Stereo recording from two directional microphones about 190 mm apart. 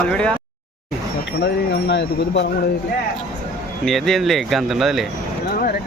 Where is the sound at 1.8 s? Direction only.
65° left (ahead or behind).